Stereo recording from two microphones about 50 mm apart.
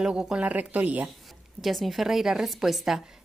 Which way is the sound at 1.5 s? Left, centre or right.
Centre.